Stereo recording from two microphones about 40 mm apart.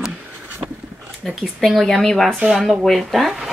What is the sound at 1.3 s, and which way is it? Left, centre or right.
A woman's voice, centre.